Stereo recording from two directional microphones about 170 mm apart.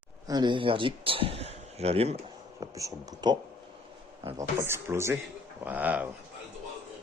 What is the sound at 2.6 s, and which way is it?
Speech, 20° right (ahead or behind).